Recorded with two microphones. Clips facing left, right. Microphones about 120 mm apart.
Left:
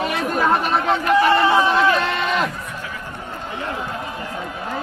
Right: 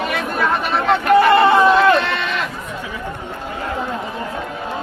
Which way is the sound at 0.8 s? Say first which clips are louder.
Right 5 dB; 65° right (ahead or behind).